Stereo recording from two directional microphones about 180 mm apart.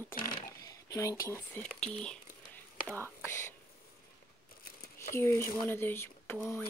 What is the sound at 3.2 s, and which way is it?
Speech, 15° left (ahead or behind).